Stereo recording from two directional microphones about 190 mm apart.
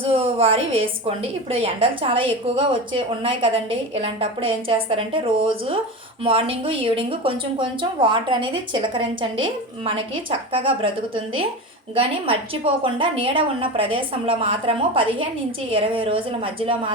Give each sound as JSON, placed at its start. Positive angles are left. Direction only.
{"t": 0.0, "sound": "a woman's voice", "side_deg": -30}